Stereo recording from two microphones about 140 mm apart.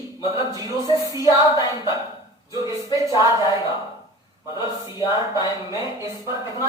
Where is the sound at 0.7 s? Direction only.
30° left (ahead or behind).